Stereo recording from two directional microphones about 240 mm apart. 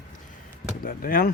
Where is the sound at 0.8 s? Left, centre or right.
Left.